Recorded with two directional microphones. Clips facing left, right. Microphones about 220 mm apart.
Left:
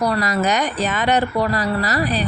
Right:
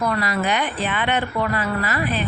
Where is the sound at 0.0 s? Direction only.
40° left (ahead or behind).